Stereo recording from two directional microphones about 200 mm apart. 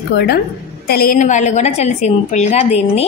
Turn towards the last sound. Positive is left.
turn(degrees=35)  # may be behind; listen again after turning